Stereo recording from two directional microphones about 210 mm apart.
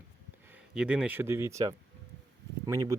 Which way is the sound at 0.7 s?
5° right (ahead or behind).